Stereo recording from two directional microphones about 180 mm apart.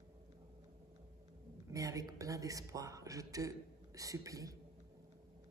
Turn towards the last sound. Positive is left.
turn(degrees=-20)  # may be behind; listen again after turning